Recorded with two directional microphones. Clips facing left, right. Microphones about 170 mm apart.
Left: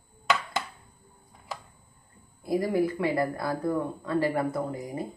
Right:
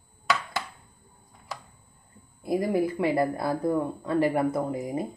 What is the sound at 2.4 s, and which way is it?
Speech, 20° right (ahead or behind).